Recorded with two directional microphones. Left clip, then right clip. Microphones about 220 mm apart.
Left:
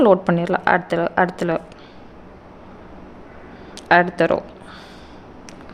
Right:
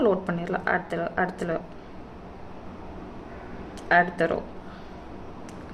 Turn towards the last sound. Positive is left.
turn(degrees=45)  # may be behind; listen again after turning